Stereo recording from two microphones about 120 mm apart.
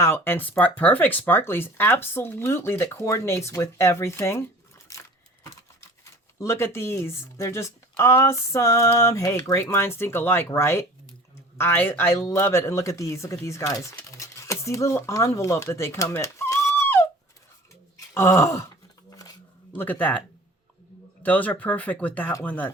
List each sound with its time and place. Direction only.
0.0 s speech: 20° left (ahead or behind)
4.9 s a sound: 25° left (ahead or behind)
6.4 s speech: 20° left (ahead or behind)
17.9 s a sound: 25° left (ahead or behind)
19.7 s speech: 15° left (ahead or behind)
21.2 s speech: 15° left (ahead or behind)